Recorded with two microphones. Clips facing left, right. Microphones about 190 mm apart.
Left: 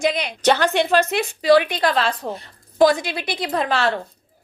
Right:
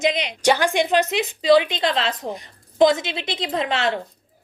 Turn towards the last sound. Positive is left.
turn(degrees=-20)  # may be behind; listen again after turning